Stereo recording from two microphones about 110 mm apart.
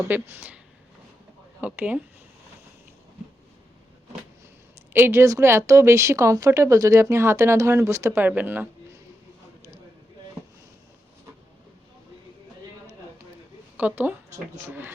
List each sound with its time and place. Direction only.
0.0 s speech: 20° right (ahead or behind)
1.6 s speech: 15° right (ahead or behind)
4.9 s a woman's voice: 20° right (ahead or behind)
13.7 s a woman's voice: 15° right (ahead or behind)